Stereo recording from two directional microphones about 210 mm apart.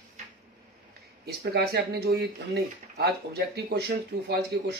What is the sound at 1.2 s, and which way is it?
A man's voice, 50° right (ahead or behind).